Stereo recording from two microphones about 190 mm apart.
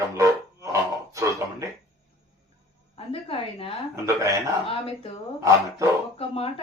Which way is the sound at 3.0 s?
30° left (ahead or behind).